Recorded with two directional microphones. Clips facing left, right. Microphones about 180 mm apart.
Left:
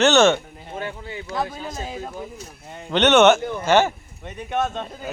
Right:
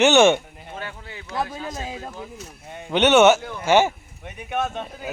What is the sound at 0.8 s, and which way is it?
Speech, 15° left (ahead or behind).